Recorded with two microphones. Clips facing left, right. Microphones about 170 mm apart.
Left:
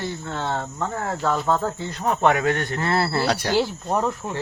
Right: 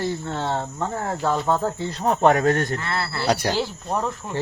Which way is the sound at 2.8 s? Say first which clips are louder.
Left 6 dB; 35° left (ahead or behind).